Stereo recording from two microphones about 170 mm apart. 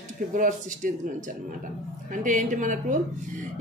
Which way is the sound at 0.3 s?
50° right (ahead or behind).